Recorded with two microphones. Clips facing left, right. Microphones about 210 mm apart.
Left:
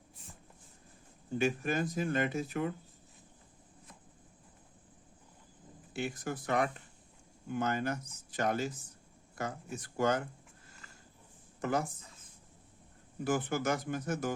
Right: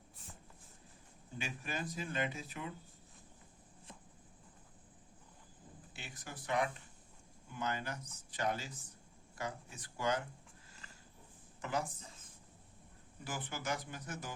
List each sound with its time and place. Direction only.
1.4 s speech: 50° left (ahead or behind)
6.0 s speech: 50° left (ahead or behind)
11.6 s speech: 45° left (ahead or behind)
13.2 s speech: 50° left (ahead or behind)